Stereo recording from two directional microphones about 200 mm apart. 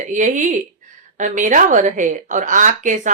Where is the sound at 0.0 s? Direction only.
40° right (ahead or behind).